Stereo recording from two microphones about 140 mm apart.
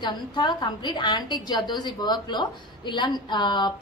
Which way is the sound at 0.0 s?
30° left (ahead or behind).